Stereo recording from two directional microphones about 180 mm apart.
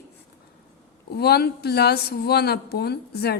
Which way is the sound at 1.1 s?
60° left (ahead or behind).